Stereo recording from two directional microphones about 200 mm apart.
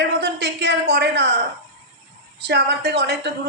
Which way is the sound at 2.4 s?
60° right (ahead or behind).